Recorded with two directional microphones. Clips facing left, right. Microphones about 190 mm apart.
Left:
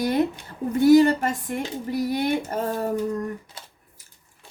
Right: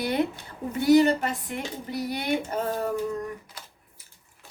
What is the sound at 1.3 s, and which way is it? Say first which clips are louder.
A woman's voice: left 5 dB; 45° left (ahead or behind).